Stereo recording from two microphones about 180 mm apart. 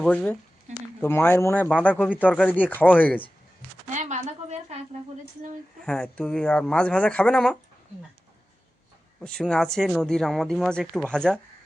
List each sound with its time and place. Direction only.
0.0 s speech: 5° left (ahead or behind)
0.7 s a sound: 40° right (ahead or behind)
1.0 s speech: 15° left (ahead or behind)
3.9 s a sound: 40° right (ahead or behind)
5.8 s speech: 5° left (ahead or behind)
9.2 s speech: 5° left (ahead or behind)